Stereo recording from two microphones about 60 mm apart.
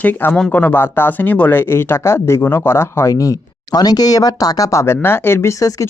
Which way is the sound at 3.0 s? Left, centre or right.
Left.